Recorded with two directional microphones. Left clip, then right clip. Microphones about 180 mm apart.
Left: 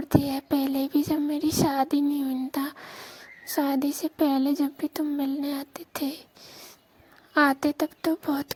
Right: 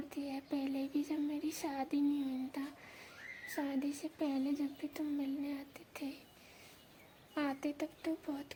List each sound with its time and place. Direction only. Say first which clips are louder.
0.2 s a sound: left 14 dB; 45° left (ahead or behind)
3.5 s speech: left 14 dB; 45° left (ahead or behind)
7.3 s speech: left 17 dB; 50° left (ahead or behind)